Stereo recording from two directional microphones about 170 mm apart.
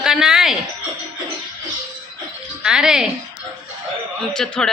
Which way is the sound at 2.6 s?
5° right (ahead or behind).